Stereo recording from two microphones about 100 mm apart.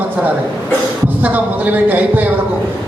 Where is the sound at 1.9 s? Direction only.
15° right (ahead or behind).